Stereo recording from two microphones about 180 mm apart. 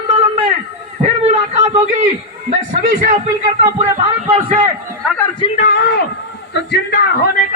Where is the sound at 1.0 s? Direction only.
35° right (ahead or behind).